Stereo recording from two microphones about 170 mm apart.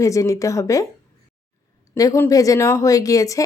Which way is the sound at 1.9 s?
15° left (ahead or behind).